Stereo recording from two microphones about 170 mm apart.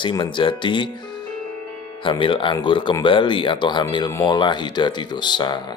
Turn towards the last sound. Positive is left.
turn(degrees=25)  # may be behind; listen again after turning